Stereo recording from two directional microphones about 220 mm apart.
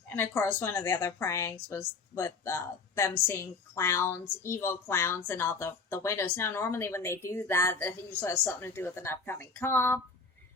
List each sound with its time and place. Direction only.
0.1 s a woman's voice: 10° left (ahead or behind)